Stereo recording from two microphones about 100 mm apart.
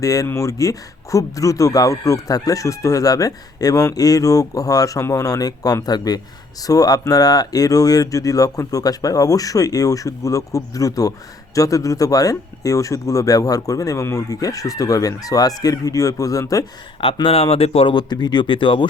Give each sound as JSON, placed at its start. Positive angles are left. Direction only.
{"t": 0.0, "sound": "speech", "side_deg": 35}
{"t": 17.2, "sound": "speech", "side_deg": 70}
{"t": 17.9, "sound": "speech", "side_deg": 45}